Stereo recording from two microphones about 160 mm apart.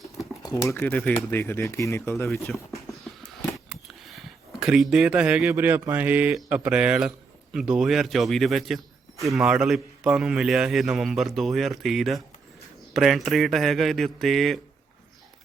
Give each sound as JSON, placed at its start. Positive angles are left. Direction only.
{"t": 0.2, "sound": "a sound", "side_deg": 20}
{"t": 0.9, "sound": "speech", "side_deg": 5}
{"t": 3.3, "sound": "a man's voice", "side_deg": 0}